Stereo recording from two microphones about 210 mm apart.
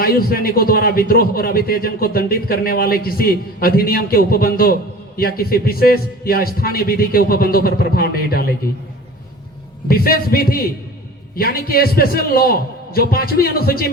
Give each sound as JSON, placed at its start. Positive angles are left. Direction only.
{"t": 0.0, "sound": "a man's voice", "side_deg": 45}
{"t": 9.9, "sound": "a man's voice", "side_deg": 45}